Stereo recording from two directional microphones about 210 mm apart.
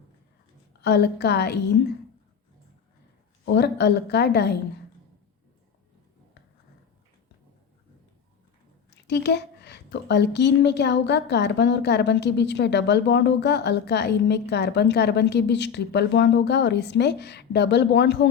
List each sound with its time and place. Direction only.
0.8 s a woman's voice: 50° left (ahead or behind)
3.4 s a woman's voice: 55° left (ahead or behind)
9.0 s a woman's voice: 55° left (ahead or behind)